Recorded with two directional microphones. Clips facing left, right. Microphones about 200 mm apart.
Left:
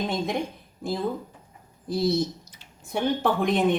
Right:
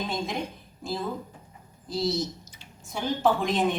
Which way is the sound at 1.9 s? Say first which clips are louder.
Left 4 dB; 60° left (ahead or behind).